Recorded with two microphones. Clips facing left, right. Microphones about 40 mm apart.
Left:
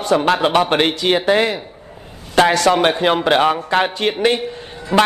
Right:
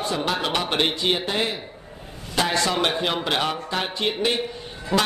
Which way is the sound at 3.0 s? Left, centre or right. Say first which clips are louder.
Left 9 dB; left.